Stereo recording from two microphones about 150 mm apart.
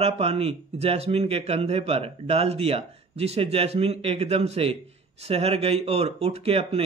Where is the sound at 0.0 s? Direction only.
40° right (ahead or behind).